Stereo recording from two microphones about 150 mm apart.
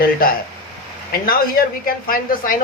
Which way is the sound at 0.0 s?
80° left.